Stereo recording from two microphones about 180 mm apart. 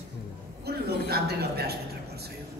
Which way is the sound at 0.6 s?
60° right (ahead or behind).